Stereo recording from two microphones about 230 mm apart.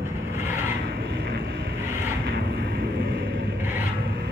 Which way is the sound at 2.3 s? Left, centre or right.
Right.